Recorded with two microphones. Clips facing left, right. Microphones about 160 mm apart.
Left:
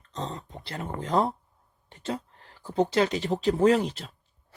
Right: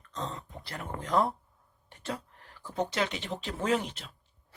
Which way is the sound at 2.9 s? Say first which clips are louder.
Left 8 dB; 35° left (ahead or behind).